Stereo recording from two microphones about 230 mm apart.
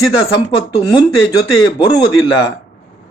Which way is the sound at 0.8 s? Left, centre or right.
Centre.